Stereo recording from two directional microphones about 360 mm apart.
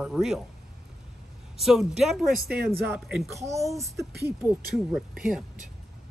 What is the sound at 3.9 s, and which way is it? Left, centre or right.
Speech, right.